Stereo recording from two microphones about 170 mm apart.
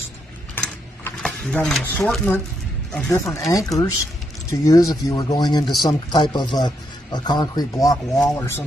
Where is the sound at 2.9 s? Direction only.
15° left (ahead or behind).